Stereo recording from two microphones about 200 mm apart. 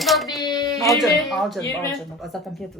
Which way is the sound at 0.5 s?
20° left (ahead or behind).